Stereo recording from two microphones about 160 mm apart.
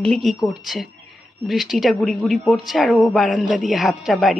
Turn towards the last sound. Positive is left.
turn(degrees=0)  # may be behind; listen again after turning